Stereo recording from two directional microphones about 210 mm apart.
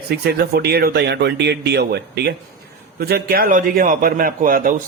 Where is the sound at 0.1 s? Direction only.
50° right (ahead or behind).